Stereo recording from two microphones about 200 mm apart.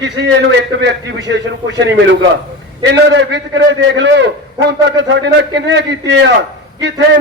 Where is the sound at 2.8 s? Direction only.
60° right (ahead or behind).